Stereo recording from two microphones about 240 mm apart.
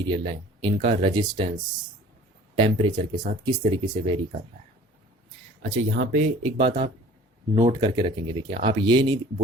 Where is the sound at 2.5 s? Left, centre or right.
Right.